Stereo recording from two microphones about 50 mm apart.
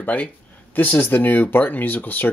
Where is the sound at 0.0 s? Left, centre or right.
Left.